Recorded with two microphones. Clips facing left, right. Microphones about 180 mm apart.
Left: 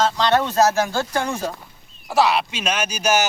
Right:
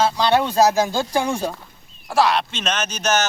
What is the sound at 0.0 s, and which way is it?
Speech, 10° right (ahead or behind).